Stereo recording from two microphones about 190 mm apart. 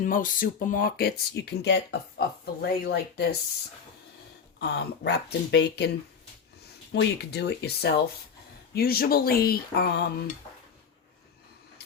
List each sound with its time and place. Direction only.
0.0 s speech: 45° left (ahead or behind)
4.6 s speech: 60° left (ahead or behind)
6.9 s speech: 60° left (ahead or behind)